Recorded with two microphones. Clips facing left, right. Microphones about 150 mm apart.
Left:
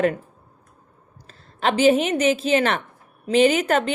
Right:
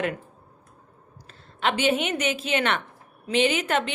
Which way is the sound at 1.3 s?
35° left (ahead or behind).